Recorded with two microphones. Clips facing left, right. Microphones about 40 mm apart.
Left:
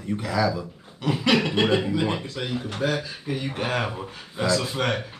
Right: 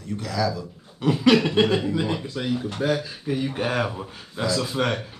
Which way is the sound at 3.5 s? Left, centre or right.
Centre.